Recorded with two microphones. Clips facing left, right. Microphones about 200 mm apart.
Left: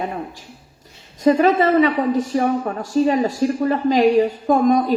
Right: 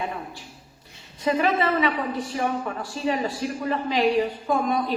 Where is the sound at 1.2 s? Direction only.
45° left (ahead or behind).